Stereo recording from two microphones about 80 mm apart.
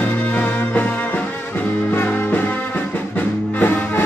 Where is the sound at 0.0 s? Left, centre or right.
Centre.